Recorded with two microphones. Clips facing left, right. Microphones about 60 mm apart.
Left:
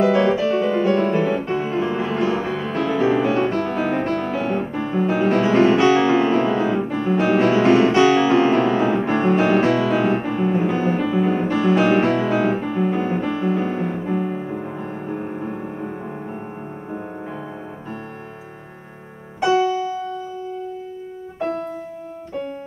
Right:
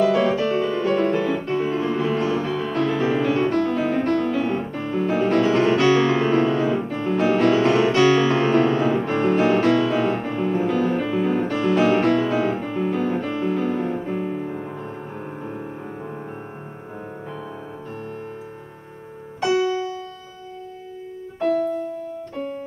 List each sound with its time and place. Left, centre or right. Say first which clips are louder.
0.0 s music: left 2 dB; left